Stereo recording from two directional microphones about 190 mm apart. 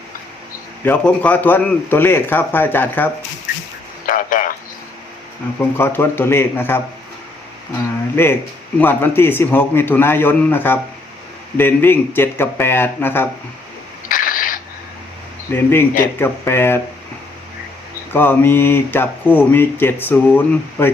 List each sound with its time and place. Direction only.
0.9 s speech: 10° left (ahead or behind)
4.0 s a sound: 45° left (ahead or behind)
5.7 s speech: 10° left (ahead or behind)
8.1 s speech: 10° left (ahead or behind)
14.1 s a sound: 45° left (ahead or behind)
15.5 s speech: 10° left (ahead or behind)
18.1 s speech: 10° left (ahead or behind)